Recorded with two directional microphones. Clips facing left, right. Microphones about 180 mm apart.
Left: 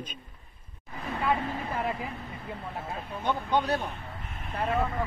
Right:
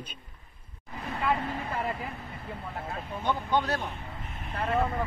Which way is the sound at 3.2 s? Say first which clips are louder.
Left 1 dB; 15° left (ahead or behind).